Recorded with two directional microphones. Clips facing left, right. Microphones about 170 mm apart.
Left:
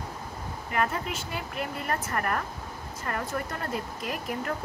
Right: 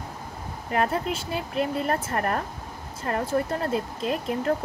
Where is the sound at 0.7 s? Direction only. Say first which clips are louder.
Right 4 dB; 35° right (ahead or behind).